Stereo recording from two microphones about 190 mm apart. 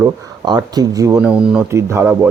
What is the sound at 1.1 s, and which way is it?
Speech, 5° right (ahead or behind).